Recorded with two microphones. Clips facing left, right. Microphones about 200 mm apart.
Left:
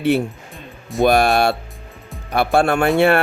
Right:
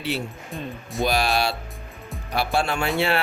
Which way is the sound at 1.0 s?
55° left (ahead or behind).